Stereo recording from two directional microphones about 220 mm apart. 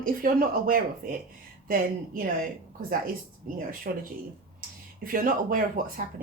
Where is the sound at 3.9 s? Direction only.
45° right (ahead or behind).